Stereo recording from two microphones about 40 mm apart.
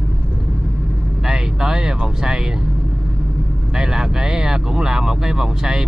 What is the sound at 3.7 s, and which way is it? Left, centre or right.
Speech, centre.